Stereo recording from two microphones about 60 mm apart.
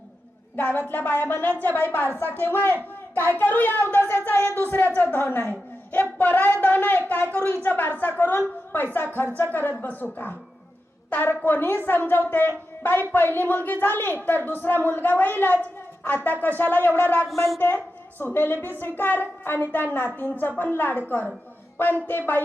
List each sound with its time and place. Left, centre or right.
0.5 s a woman's voice: left